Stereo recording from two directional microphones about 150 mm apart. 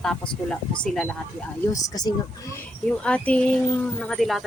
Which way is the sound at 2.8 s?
10° left (ahead or behind).